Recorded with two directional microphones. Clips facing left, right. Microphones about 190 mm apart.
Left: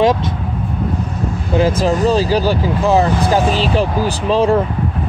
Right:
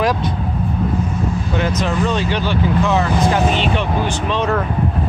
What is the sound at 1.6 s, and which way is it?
Speech, 30° left (ahead or behind).